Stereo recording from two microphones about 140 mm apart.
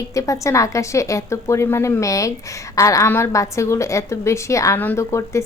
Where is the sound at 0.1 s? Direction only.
20° left (ahead or behind).